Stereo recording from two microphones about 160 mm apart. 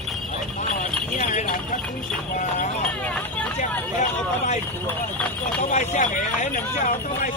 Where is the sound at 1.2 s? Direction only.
50° left (ahead or behind).